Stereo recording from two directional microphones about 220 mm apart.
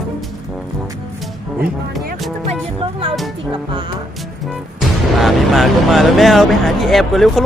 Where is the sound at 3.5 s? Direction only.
25° right (ahead or behind).